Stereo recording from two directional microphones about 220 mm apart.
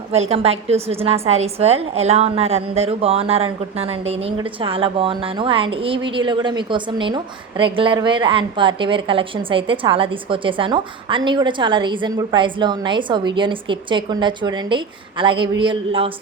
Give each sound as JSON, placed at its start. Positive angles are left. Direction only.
{"t": 0.1, "sound": "a woman's voice", "side_deg": -30}